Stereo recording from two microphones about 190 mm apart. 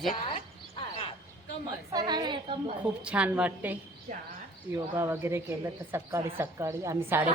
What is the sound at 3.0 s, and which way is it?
A woman's voice, 5° right (ahead or behind).